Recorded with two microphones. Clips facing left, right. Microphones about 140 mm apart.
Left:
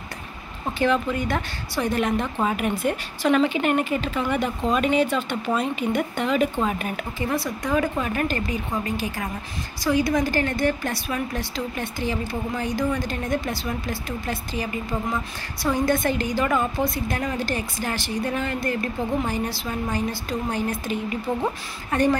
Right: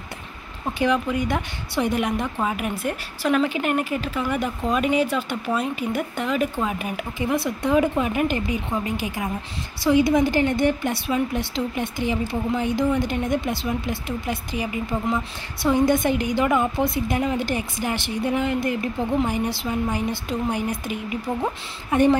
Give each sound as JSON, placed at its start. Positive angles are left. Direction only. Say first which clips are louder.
{"t": 0.7, "sound": "a woman's voice", "louder": "even", "side_deg": -10}